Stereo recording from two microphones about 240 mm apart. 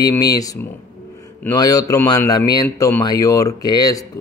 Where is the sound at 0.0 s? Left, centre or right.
Centre.